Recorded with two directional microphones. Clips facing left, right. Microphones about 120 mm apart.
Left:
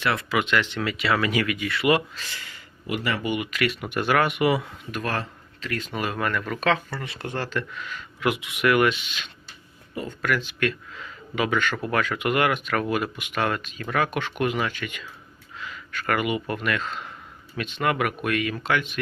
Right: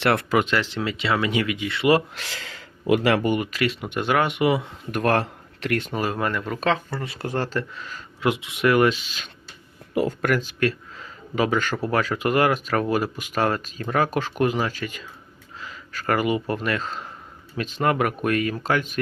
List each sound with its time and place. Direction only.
0.0 s speech: 65° right (ahead or behind)
0.3 s speech: 40° right (ahead or behind)
2.1 s speech: 85° right
3.2 s speech: 45° right (ahead or behind); by 4.7 s 25° right (ahead or behind)
4.9 s speech: 55° right (ahead or behind)
5.9 s speech: 30° right (ahead or behind)
9.9 s speech: 85° right
10.2 s speech: 45° right (ahead or behind)